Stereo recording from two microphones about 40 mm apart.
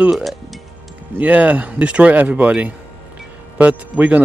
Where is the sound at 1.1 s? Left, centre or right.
Right.